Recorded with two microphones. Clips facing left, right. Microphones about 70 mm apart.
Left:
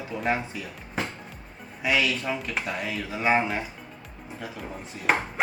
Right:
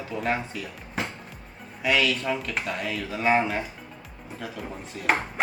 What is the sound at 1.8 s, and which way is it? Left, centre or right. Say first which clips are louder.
Speech: right 1 dB; centre.